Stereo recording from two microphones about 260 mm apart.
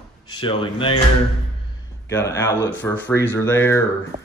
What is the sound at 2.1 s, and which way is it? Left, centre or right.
Speech, centre.